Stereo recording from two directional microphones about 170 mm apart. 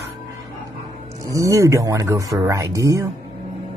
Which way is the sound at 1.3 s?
20° right (ahead or behind).